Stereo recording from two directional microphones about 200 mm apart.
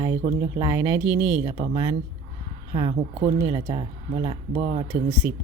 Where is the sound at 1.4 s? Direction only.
20° right (ahead or behind).